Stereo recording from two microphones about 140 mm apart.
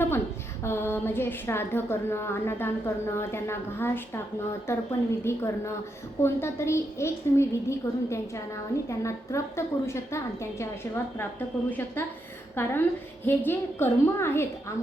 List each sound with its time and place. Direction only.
0.6 s a woman's voice: 15° left (ahead or behind)
11.2 s a woman's voice: 15° left (ahead or behind)